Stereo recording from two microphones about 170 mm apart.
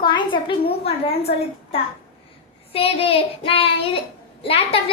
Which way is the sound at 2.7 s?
35° left (ahead or behind).